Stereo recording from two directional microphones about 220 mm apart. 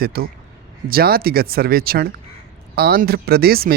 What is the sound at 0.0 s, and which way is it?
A man's voice, 45° right (ahead or behind).